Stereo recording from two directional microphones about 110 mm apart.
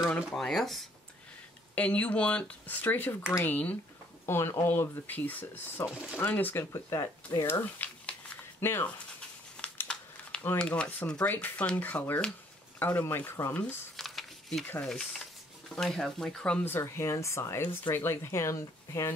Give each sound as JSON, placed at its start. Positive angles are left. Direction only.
{"t": 0.1, "sound": "speech", "side_deg": 5}
{"t": 1.8, "sound": "speech", "side_deg": 10}
{"t": 7.4, "sound": "a sound", "side_deg": 20}
{"t": 9.6, "sound": "speech", "side_deg": 10}
{"t": 13.9, "sound": "a sound", "side_deg": 0}
{"t": 15.7, "sound": "speech", "side_deg": 5}